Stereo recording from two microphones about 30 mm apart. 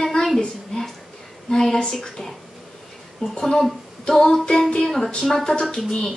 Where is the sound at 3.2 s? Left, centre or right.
Left.